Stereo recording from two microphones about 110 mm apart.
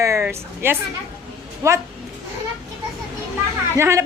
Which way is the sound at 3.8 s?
25° right (ahead or behind).